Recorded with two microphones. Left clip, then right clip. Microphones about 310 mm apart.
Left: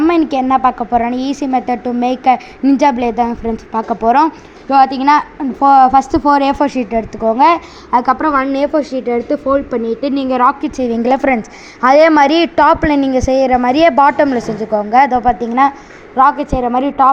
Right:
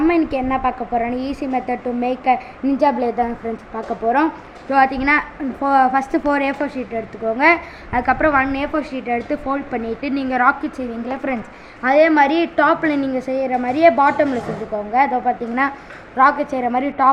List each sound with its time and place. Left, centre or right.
0.0 s a sound: left
0.4 s a woman's voice: left
1.1 s a woman's voice: left
1.5 s a woman's voice: left